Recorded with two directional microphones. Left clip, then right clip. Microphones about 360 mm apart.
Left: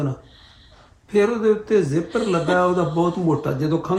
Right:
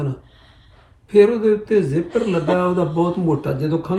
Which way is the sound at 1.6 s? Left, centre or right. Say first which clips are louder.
Right 1 dB; centre.